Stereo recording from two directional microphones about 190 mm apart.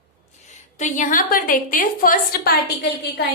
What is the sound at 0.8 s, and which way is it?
A woman's voice, 45° left (ahead or behind).